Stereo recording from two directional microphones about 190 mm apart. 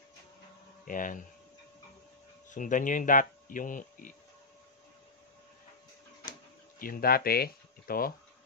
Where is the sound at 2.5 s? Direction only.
45° left (ahead or behind).